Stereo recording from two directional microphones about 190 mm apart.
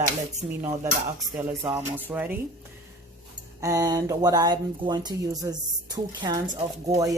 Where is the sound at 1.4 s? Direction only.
15° right (ahead or behind).